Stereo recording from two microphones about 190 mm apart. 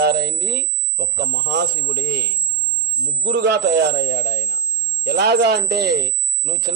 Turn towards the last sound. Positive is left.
turn(degrees=-55)  # may be behind; listen again after turning